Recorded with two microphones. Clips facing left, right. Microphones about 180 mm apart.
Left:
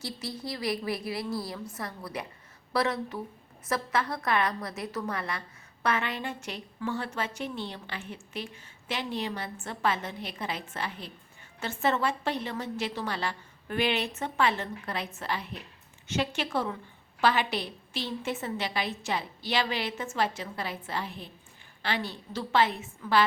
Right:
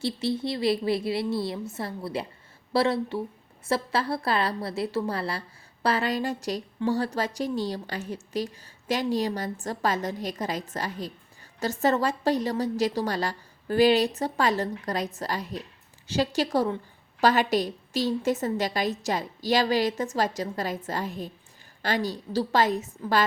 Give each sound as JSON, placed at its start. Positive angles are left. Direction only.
{"t": 0.0, "sound": "a woman's voice", "side_deg": -25}